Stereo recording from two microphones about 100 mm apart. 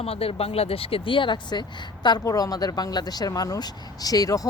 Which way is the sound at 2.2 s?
35° left (ahead or behind).